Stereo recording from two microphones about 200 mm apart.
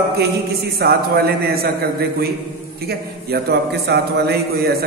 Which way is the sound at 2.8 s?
55° right (ahead or behind).